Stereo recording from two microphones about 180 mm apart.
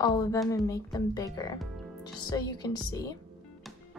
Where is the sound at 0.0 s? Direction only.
20° left (ahead or behind).